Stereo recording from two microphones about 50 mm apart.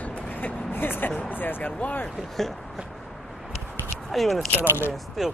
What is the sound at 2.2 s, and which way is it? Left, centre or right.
Speech, centre.